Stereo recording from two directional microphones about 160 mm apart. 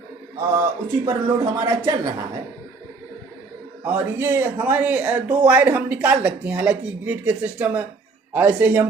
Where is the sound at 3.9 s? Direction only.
10° right (ahead or behind).